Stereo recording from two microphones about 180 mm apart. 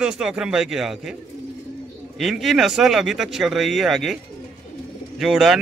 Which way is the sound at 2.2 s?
Centre (ahead or behind).